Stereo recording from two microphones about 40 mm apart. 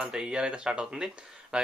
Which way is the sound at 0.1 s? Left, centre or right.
Centre.